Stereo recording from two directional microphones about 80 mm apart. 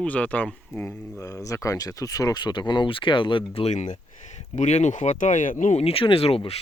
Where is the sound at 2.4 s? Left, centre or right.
Left.